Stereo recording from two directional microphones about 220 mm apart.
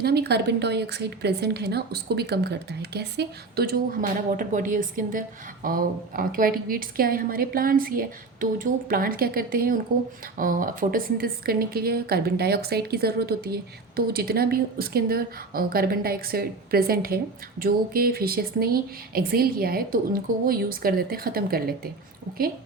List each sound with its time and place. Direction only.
0.0 s a woman's voice: 45° right (ahead or behind)